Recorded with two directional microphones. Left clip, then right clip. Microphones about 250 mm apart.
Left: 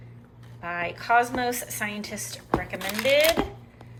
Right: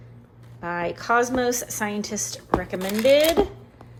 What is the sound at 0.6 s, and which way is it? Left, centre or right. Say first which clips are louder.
Speech: right 3 dB; centre.